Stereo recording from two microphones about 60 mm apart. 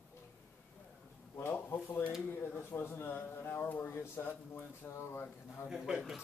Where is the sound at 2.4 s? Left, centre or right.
Left.